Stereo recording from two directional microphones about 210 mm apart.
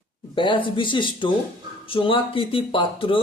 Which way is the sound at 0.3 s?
25° left (ahead or behind).